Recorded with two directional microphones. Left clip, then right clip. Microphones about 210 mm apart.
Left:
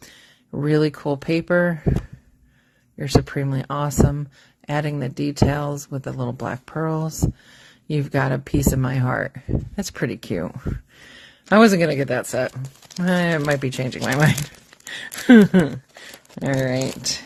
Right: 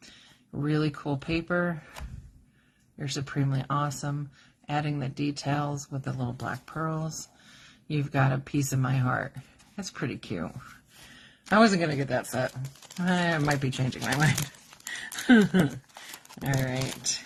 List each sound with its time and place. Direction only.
0.6 s speech: 40° left (ahead or behind)
3.0 s speech: 40° left (ahead or behind)